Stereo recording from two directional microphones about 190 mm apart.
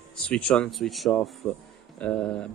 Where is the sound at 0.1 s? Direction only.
5° left (ahead or behind).